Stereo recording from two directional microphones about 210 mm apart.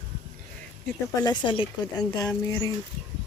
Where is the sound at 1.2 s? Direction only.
20° left (ahead or behind).